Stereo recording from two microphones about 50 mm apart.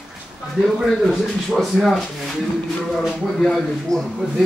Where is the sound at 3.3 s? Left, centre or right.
Centre.